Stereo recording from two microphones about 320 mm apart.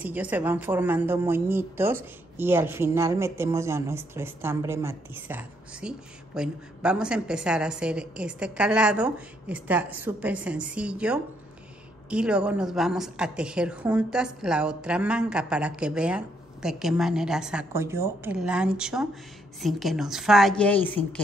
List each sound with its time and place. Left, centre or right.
0.0 s speech: centre